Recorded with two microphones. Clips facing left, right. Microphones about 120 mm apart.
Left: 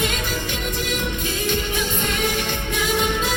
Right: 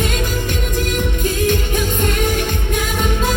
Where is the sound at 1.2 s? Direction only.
45° right (ahead or behind).